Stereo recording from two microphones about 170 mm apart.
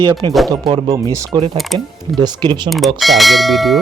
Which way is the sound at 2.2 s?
25° right (ahead or behind).